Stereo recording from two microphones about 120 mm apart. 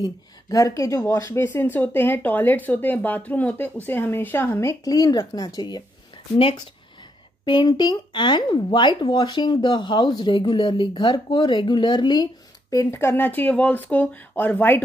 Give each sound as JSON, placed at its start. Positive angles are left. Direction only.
{"t": 0.0, "sound": "speech", "side_deg": 30}
{"t": 6.3, "sound": "speech", "side_deg": 45}
{"t": 12.7, "sound": "speech", "side_deg": 20}